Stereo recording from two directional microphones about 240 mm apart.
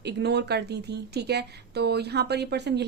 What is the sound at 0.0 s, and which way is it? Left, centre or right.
Speech, right.